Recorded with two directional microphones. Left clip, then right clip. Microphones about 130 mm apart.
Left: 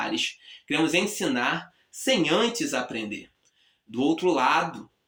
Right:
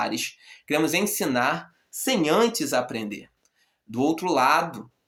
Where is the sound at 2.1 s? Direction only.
35° right (ahead or behind).